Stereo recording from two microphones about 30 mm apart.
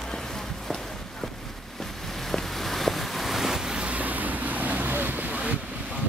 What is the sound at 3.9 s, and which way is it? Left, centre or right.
Vehicle, right.